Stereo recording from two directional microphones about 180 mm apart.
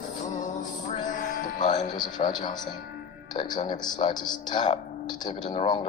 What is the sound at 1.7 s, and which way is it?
A man's voice, 25° left (ahead or behind).